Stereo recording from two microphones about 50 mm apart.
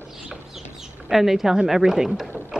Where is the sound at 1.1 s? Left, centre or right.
Centre.